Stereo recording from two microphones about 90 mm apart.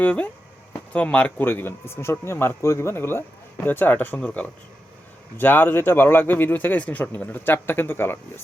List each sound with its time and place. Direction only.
0.0 s speech: 15° left (ahead or behind)